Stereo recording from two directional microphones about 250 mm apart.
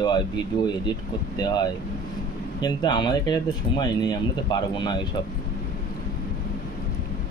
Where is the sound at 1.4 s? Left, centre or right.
Centre.